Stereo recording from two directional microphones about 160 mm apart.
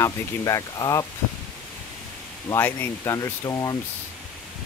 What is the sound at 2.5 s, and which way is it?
Speech, 15° left (ahead or behind).